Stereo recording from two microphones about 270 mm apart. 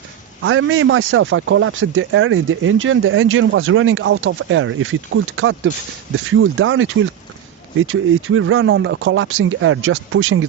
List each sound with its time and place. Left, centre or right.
0.4 s speech: right